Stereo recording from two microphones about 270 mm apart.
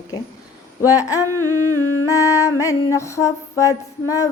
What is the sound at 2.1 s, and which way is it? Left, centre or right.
Music, centre.